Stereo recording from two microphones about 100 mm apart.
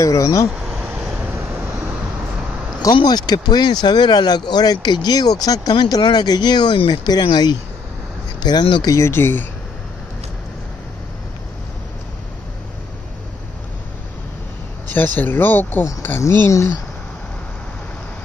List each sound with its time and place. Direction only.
0.0 s speech: 35° left (ahead or behind)
0.5 s a sound: 10° right (ahead or behind)
2.8 s speech: 45° left (ahead or behind)
8.8 s speech: 30° left (ahead or behind)
14.9 s speech: 15° left (ahead or behind)